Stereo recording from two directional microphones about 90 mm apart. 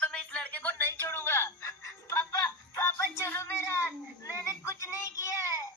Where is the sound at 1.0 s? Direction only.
25° left (ahead or behind).